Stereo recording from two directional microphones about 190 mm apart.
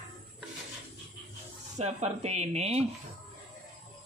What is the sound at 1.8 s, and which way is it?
Speech, 35° right (ahead or behind).